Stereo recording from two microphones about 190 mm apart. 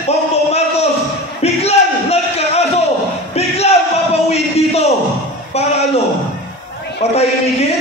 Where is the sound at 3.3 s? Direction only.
35° left (ahead or behind).